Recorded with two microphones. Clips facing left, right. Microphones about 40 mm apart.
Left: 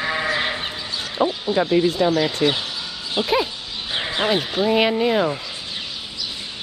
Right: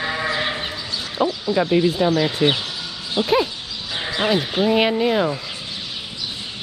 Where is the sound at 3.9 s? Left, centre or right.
Left.